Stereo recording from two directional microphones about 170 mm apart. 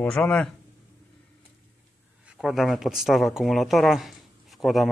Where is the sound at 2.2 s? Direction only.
5° right (ahead or behind).